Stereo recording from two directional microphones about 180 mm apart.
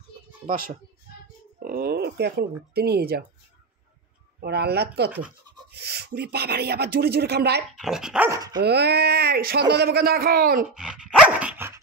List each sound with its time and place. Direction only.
0.5 s speech: 50° right (ahead or behind)
4.4 s speech: 60° right (ahead or behind)
7.8 s speech: 5° right (ahead or behind)
8.3 s speech: 20° right (ahead or behind)
8.6 s speech: 65° right (ahead or behind)
10.7 s dog: 5° right (ahead or behind)